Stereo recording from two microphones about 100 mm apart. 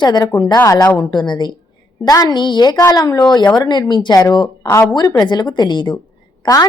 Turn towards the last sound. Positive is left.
turn(degrees=40)  # may be behind; listen again after turning